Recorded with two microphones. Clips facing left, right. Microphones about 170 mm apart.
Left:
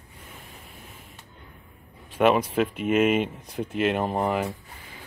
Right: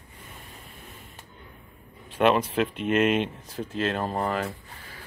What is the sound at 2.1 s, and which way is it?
Speech, 10° left (ahead or behind).